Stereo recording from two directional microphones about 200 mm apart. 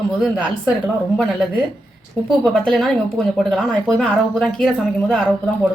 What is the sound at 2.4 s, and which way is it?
Speech, 5° left (ahead or behind).